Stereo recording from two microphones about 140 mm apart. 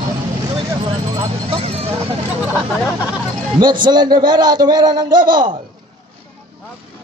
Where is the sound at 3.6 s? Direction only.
30° right (ahead or behind).